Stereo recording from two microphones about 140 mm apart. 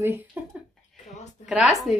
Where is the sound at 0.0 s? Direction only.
15° right (ahead or behind).